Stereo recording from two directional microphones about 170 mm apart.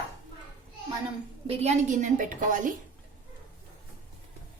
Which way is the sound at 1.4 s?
40° right (ahead or behind).